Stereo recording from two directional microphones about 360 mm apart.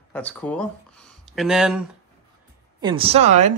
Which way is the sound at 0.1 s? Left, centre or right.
Centre.